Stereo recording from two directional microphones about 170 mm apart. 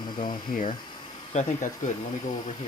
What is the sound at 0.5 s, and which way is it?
Speech, 50° left (ahead or behind).